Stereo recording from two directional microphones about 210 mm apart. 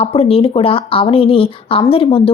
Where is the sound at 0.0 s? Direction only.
30° left (ahead or behind).